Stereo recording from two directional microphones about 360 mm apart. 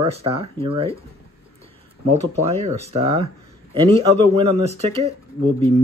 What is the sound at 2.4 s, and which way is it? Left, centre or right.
Speech, centre.